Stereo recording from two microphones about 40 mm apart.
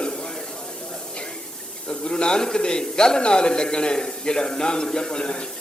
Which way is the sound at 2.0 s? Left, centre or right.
Left.